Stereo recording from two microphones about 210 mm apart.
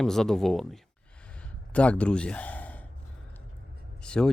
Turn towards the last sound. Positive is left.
turn(degrees=5)  # may be behind; listen again after turning